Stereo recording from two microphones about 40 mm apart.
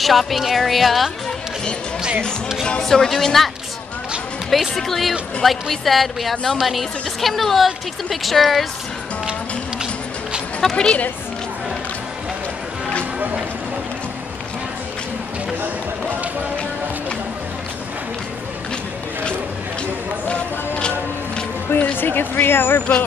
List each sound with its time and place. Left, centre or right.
0.0 s a woman's voice: centre
2.8 s speech: centre
4.5 s a woman's voice: centre
10.6 s speech: centre
21.9 s speech: left